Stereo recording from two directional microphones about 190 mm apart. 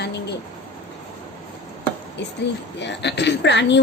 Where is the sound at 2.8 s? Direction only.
65° left (ahead or behind).